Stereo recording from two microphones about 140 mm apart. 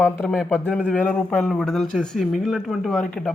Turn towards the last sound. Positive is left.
turn(degrees=5)  # may be behind; listen again after turning